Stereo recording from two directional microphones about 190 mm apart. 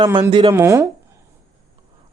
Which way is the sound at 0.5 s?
15° right (ahead or behind).